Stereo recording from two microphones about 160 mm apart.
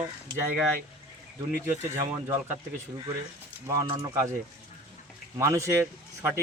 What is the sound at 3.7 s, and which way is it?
Speech, 25° right (ahead or behind).